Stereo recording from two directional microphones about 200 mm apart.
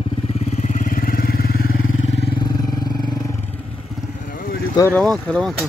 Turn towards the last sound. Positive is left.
turn(degrees=5)  # may be behind; listen again after turning